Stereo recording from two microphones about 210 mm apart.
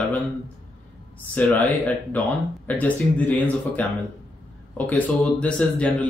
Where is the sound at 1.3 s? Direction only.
5° left (ahead or behind).